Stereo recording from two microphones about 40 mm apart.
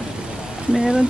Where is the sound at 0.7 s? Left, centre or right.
Centre.